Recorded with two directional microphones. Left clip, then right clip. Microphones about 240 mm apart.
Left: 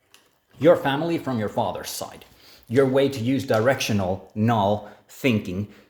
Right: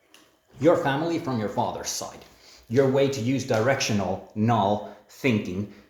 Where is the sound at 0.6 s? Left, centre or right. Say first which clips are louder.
Left 3 dB; left.